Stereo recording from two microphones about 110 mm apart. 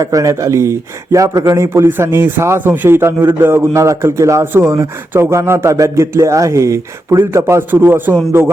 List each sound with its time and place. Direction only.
0.0 s speech: 30° right (ahead or behind)